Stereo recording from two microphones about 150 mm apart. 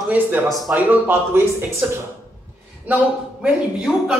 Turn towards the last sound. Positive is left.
turn(degrees=-5)  # may be behind; listen again after turning